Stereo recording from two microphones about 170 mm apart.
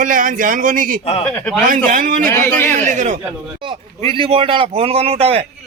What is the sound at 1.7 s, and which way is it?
Speech, 50° right (ahead or behind).